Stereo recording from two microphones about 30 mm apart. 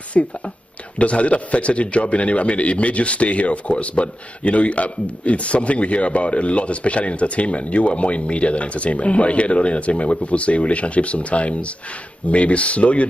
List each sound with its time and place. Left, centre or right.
0.2 s a man's voice: left